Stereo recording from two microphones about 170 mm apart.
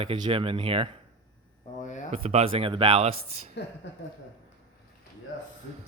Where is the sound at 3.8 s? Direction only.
90° left.